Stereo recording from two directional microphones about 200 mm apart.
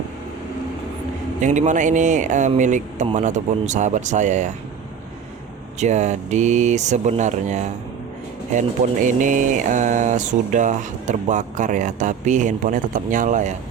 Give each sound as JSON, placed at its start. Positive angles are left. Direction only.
{"t": 1.4, "sound": "speech", "side_deg": -35}
{"t": 5.8, "sound": "speech", "side_deg": -35}